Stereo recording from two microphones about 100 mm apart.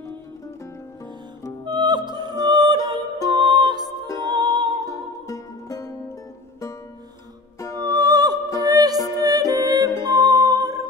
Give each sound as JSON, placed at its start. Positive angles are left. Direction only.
{"t": 1.6, "sound": "music", "side_deg": -45}
{"t": 4.8, "sound": "music", "side_deg": 35}
{"t": 7.8, "sound": "music", "side_deg": -40}